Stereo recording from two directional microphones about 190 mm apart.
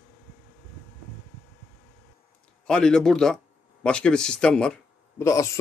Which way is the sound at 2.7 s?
5° left (ahead or behind).